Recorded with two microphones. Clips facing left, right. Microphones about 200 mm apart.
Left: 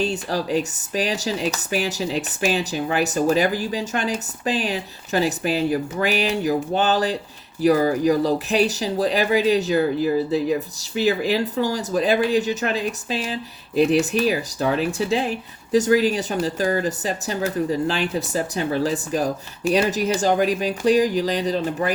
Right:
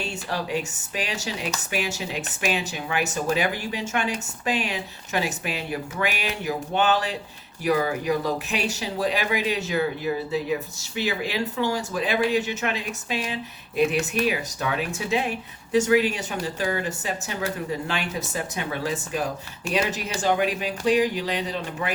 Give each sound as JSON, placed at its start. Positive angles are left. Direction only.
{"t": 0.0, "sound": "speech", "side_deg": 35}